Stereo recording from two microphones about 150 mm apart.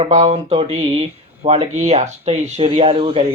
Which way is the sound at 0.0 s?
45° right (ahead or behind).